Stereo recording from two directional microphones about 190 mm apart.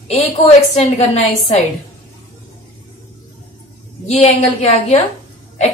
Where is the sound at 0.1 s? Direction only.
35° left (ahead or behind).